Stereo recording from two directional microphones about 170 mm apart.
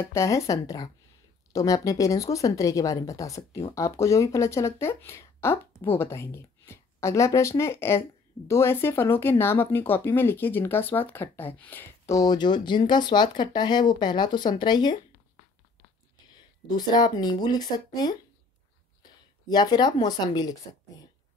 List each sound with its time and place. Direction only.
0.0 s speech: 15° left (ahead or behind)
16.6 s speech: 25° left (ahead or behind)